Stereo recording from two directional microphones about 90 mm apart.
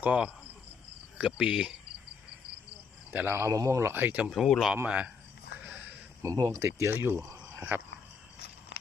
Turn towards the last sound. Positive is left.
turn(degrees=-15)  # may be behind; listen again after turning